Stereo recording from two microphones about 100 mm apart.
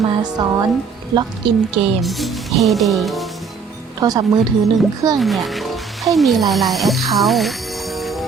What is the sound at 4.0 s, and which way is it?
Speech, 40° right (ahead or behind).